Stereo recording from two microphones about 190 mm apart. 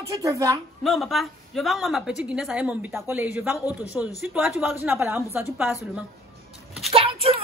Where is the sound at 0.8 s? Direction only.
Centre (ahead or behind).